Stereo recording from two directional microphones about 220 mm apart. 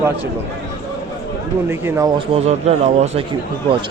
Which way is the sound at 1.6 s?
10° right (ahead or behind).